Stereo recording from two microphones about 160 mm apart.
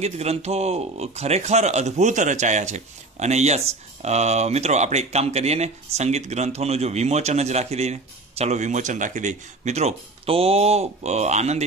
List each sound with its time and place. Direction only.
0.0 s speech: 40° right (ahead or behind)